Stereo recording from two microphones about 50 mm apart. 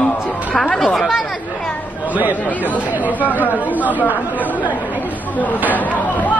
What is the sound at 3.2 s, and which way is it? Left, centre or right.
Speech, left.